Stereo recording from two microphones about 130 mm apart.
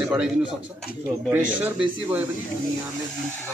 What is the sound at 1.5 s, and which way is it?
Speech, 10° right (ahead or behind).